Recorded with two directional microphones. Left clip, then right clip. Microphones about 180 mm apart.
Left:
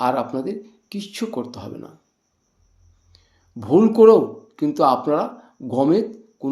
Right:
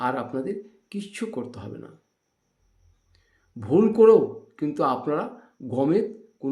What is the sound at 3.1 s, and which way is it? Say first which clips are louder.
Speech: left 6 dB; 15° right (ahead or behind).